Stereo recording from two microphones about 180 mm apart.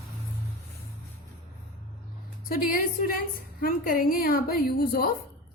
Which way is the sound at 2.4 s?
55° left (ahead or behind).